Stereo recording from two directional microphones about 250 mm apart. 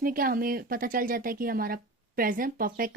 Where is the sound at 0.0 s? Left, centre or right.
Right.